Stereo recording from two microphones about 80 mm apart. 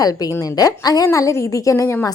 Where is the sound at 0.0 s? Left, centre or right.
Left.